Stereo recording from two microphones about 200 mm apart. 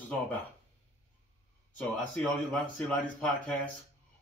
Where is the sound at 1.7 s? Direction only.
10° left (ahead or behind).